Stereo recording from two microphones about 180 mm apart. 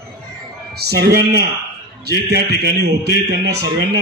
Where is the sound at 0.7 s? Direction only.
65° right (ahead or behind).